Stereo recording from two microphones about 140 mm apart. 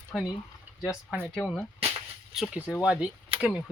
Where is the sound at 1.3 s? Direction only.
Centre (ahead or behind).